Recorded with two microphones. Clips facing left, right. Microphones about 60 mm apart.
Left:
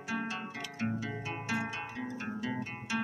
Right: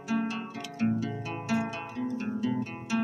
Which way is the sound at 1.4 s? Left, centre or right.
Centre.